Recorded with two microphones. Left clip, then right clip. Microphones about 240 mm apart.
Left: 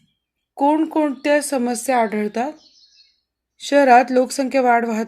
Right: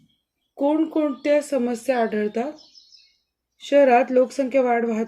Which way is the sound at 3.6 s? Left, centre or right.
Centre.